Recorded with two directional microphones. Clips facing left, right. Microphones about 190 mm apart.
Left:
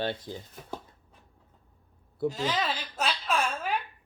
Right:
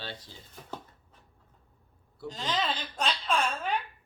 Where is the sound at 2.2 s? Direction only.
10° left (ahead or behind).